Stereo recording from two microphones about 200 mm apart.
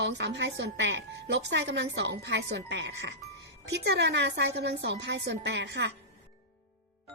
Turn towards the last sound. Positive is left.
turn(degrees=-60)  # may be behind; listen again after turning